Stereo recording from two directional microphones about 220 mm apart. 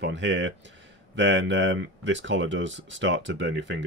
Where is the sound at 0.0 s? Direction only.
55° right (ahead or behind).